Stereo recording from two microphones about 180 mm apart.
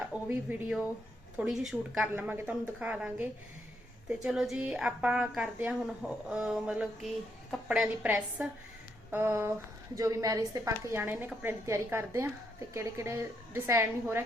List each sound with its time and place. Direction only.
0.0 s a woman's voice: 5° right (ahead or behind)